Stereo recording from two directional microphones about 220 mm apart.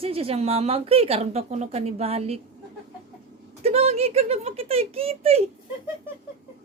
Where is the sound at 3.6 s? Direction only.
30° right (ahead or behind).